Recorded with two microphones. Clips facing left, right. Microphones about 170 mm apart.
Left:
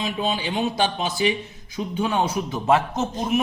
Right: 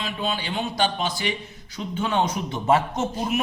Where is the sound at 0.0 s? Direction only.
15° left (ahead or behind); by 3.4 s centre (ahead or behind).